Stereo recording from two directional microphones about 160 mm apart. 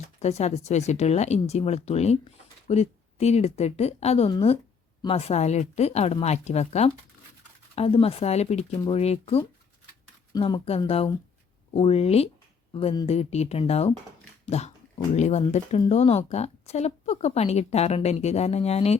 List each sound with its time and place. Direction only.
0.2 s speech: 40° left (ahead or behind)
10.3 s speech: 25° left (ahead or behind)
10.7 s speech: 40° left (ahead or behind)
12.7 s speech: 30° left (ahead or behind)
13.1 s speech: 40° left (ahead or behind)